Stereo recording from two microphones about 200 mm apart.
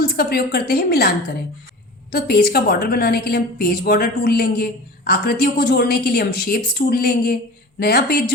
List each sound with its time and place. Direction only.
0.0 s a woman's voice: 50° left (ahead or behind)
2.1 s a woman's voice: 50° left (ahead or behind)